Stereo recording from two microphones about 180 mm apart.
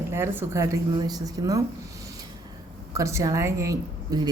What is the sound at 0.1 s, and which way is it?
Speech, 15° right (ahead or behind).